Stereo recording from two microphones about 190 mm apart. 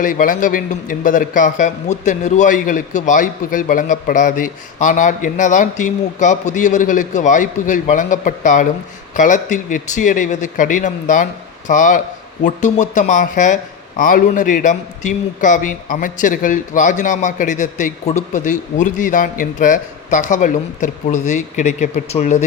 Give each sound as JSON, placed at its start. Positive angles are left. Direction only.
{"t": 0.0, "sound": "a man's voice", "side_deg": 45}